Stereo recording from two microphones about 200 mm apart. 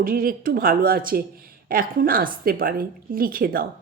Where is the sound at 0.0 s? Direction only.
45° right (ahead or behind).